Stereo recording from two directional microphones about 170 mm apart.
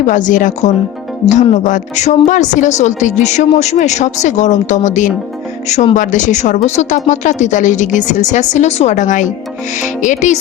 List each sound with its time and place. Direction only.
0.1 s a woman's voice: 50° left (ahead or behind)